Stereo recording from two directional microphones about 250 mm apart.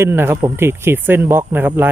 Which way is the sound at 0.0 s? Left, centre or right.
Centre.